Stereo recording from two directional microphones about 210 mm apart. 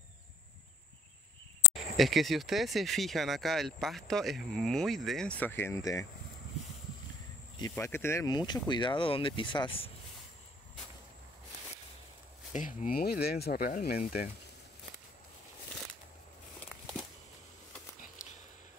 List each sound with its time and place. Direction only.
1.7 s speech: centre (ahead or behind); by 6.0 s 15° left (ahead or behind)
7.5 s speech: 15° left (ahead or behind)
12.5 s speech: 40° left (ahead or behind)